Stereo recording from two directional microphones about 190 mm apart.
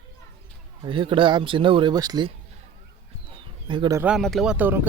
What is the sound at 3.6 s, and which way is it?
Speech, 25° right (ahead or behind).